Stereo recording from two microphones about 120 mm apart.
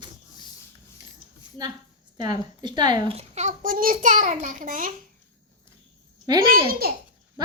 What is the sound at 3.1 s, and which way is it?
A child's voice, 70° right (ahead or behind).